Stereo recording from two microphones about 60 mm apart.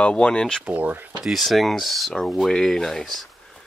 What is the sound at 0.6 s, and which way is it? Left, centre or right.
Speech, right.